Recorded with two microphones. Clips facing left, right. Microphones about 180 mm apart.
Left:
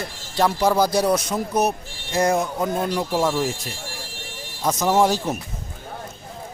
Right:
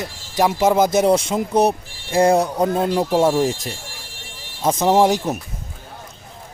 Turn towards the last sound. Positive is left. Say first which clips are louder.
# right 3 dB
turn(degrees=-20)  # may be behind; listen again after turning